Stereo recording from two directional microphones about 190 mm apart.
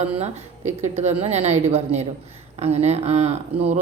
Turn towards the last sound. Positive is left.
turn(degrees=-35)  # may be behind; listen again after turning